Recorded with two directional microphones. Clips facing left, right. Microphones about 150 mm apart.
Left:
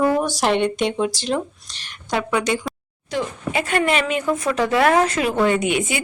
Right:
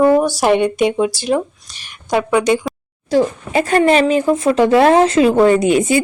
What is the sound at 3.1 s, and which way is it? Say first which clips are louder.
Speech: right 9 dB; 35° right (ahead or behind).